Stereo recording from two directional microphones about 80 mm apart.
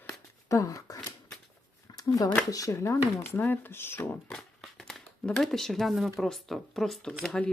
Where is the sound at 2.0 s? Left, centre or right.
Left.